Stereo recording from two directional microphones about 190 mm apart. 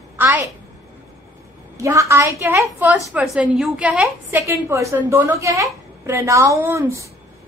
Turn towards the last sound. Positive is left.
turn(degrees=-15)  # may be behind; listen again after turning